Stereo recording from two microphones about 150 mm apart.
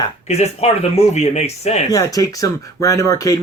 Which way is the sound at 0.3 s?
45° left (ahead or behind).